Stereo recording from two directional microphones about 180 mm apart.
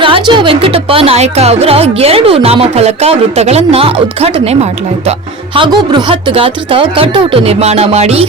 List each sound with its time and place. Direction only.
0.0 s speech: 25° right (ahead or behind)
5.5 s speech: 25° right (ahead or behind)